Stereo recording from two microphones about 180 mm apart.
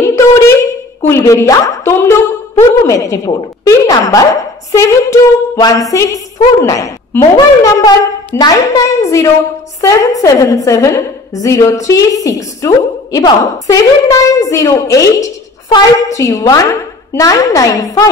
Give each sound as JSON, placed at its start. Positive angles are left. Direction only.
{"t": 0.1, "sound": "a sound", "side_deg": 15}
{"t": 1.0, "sound": "a woman's voice", "side_deg": 15}
{"t": 2.9, "sound": "music", "side_deg": 20}
{"t": 11.3, "sound": "a woman's voice", "side_deg": 20}